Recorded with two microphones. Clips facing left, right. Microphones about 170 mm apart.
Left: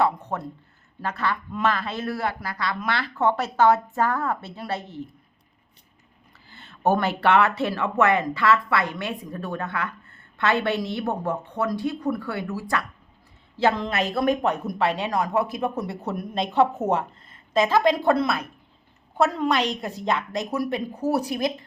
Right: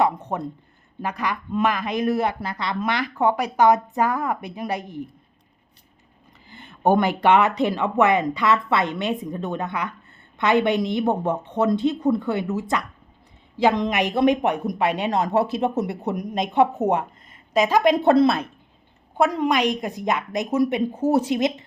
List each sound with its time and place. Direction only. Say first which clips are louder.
0.0 s speech: right 2 dB; 20° right (ahead or behind)
6.5 s speech: right 3 dB; 15° right (ahead or behind)
19.4 s speech: right 3 dB; 15° right (ahead or behind)